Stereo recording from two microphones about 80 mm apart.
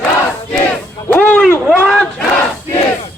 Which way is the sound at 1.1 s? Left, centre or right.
Centre.